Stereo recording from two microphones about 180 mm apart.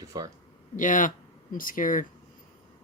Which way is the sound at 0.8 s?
45° left (ahead or behind).